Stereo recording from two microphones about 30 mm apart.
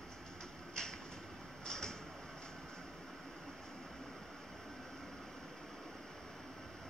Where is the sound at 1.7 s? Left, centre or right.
Left.